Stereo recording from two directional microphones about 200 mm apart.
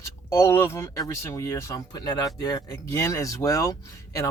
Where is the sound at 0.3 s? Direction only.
15° left (ahead or behind).